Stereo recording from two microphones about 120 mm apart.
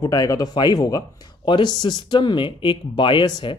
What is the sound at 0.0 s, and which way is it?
Speech, 30° left (ahead or behind).